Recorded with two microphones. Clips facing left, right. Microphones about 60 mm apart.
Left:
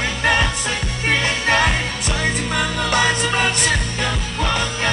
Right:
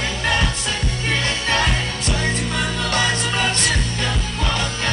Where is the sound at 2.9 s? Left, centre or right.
Left.